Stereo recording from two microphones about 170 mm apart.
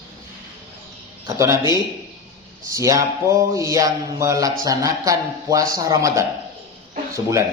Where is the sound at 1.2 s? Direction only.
15° right (ahead or behind).